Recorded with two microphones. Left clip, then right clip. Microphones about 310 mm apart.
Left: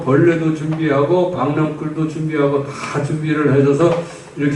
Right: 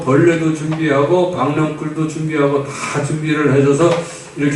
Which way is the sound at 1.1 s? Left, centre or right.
Left.